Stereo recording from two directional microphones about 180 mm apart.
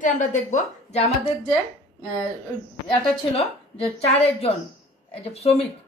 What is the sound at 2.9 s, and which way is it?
A woman's voice, 35° left (ahead or behind).